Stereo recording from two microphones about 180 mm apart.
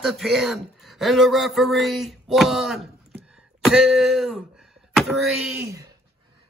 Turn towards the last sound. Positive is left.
turn(degrees=-15)  # may be behind; listen again after turning